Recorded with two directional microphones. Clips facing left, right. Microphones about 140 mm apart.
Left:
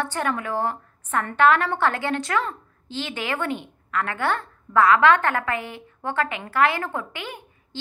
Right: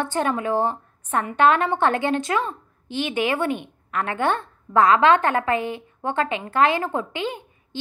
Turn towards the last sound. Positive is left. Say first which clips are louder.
# right 6 dB
turn(degrees=-20)  # may be behind; listen again after turning